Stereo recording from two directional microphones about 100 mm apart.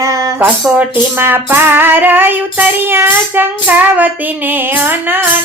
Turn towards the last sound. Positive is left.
turn(degrees=-20)  # may be behind; listen again after turning